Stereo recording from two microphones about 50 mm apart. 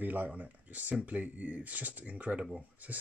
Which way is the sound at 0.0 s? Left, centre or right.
Right.